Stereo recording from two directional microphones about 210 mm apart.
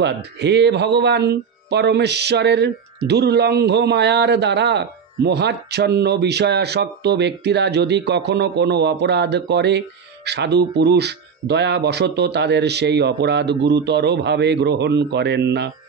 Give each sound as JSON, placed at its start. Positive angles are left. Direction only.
{"t": 0.0, "sound": "speech", "side_deg": -55}